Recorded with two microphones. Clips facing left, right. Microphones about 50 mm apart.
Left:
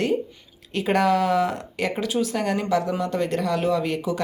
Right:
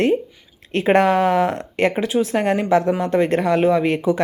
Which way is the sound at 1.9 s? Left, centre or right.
Right.